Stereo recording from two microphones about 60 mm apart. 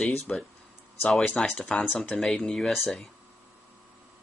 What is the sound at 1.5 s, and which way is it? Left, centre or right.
Speech, centre.